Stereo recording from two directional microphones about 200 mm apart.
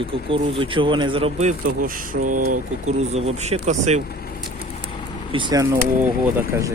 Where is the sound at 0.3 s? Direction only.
25° right (ahead or behind).